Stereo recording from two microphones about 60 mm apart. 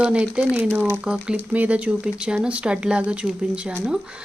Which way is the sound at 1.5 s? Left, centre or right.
Right.